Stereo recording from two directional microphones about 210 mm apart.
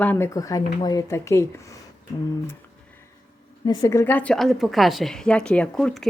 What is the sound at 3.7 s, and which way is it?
A woman's voice, 15° left (ahead or behind).